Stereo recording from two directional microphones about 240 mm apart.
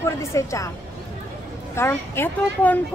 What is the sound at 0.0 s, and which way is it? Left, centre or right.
Speech, centre.